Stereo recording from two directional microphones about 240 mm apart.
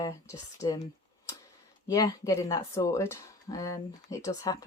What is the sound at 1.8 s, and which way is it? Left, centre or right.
Speech, centre.